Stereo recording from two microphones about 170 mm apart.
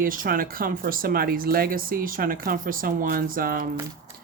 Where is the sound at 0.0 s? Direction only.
55° right (ahead or behind).